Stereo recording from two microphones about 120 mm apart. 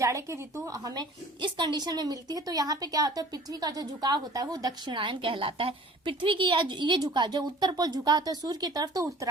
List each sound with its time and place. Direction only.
0.0 s a woman's voice: 25° right (ahead or behind)